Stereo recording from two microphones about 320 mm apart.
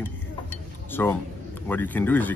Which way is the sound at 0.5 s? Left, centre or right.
Centre.